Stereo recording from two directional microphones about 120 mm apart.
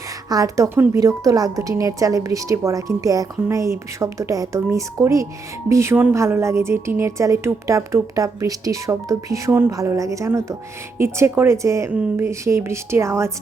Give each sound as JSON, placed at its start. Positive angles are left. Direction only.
{"t": 0.3, "sound": "a woman's voice", "side_deg": -30}